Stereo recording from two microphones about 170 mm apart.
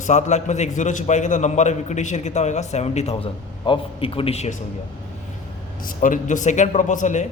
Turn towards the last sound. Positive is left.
turn(degrees=45)  # may be behind; listen again after turning